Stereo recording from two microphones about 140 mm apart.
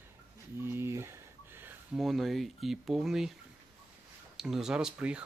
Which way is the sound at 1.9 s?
Centre (ahead or behind).